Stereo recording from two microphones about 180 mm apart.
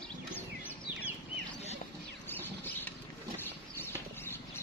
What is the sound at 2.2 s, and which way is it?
Rodents, 10° left (ahead or behind).